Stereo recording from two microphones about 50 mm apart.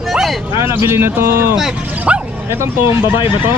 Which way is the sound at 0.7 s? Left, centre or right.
Right.